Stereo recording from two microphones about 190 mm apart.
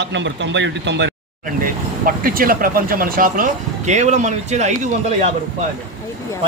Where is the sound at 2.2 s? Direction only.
50° right (ahead or behind).